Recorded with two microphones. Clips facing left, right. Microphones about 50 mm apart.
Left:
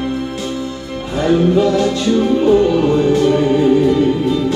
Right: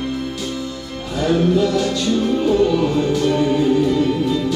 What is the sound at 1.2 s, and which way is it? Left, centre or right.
Music, centre.